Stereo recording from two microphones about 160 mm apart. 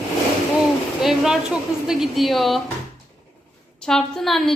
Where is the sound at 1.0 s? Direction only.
Centre (ahead or behind).